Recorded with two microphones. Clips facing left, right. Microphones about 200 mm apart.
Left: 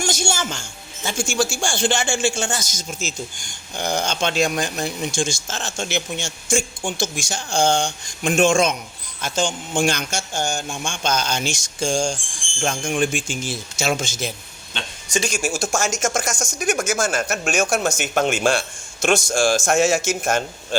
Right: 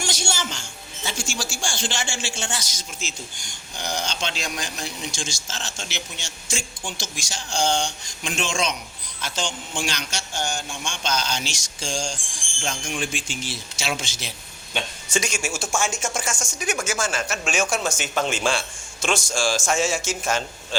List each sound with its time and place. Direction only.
0.0 s music: 45° left (ahead or behind)
1.0 s speech: 50° left (ahead or behind)
15.1 s speech: 15° left (ahead or behind)
15.5 s speech: 40° left (ahead or behind)
17.7 s speech: 65° left (ahead or behind)